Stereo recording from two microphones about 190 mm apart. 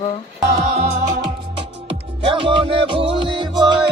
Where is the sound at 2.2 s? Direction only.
25° right (ahead or behind).